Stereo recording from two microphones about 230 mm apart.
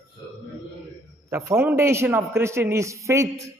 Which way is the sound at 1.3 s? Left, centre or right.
Centre.